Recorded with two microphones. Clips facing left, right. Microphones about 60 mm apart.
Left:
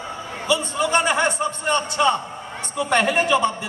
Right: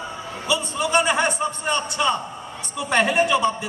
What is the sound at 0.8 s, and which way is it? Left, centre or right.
Speech, centre.